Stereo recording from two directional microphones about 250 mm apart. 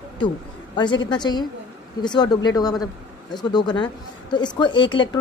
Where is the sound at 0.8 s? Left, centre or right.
Centre.